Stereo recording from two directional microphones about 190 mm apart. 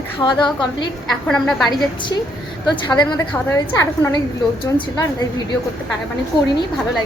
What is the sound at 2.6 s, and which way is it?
A woman's voice, 20° left (ahead or behind).